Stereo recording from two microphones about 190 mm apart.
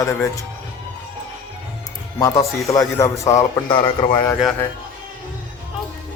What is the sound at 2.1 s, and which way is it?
Speech, 15° left (ahead or behind).